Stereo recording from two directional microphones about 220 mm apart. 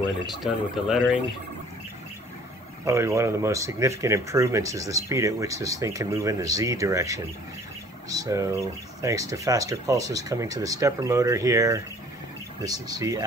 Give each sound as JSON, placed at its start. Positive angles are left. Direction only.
{"t": 0.4, "sound": "speech", "side_deg": 0}
{"t": 2.8, "sound": "speech", "side_deg": -15}